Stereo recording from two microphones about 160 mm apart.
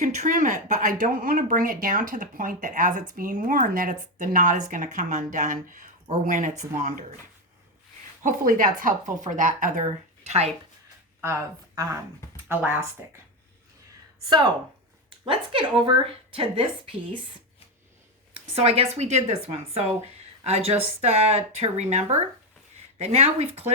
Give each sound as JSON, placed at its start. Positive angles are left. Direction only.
{"t": 0.0, "sound": "speech", "side_deg": -45}
{"t": 8.2, "sound": "speech", "side_deg": -55}
{"t": 10.2, "sound": "a woman's voice", "side_deg": -40}
{"t": 11.2, "sound": "speech", "side_deg": -15}
{"t": 14.3, "sound": "a woman's voice", "side_deg": -30}
{"t": 18.6, "sound": "a woman's voice", "side_deg": -40}